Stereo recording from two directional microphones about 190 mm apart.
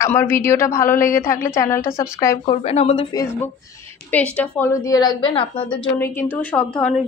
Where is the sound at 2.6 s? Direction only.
30° left (ahead or behind).